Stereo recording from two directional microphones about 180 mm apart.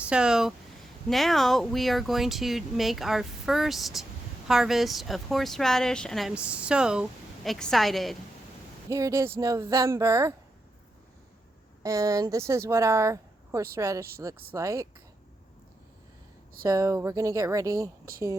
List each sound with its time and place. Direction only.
0.0 s speech: 5° right (ahead or behind)
8.9 s speech: 20° right (ahead or behind)
11.8 s speech: 15° right (ahead or behind)
16.6 s speech: 15° right (ahead or behind)